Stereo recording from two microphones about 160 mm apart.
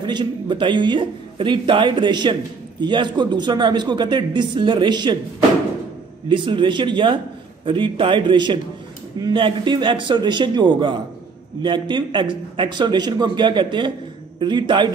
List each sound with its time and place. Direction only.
0.0 s a man's voice: 30° right (ahead or behind)
6.2 s a man's voice: 30° right (ahead or behind)